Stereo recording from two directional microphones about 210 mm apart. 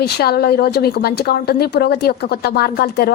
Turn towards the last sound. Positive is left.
turn(degrees=45)  # may be behind; listen again after turning